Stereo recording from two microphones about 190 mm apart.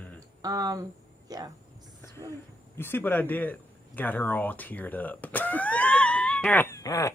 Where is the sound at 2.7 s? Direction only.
10° left (ahead or behind).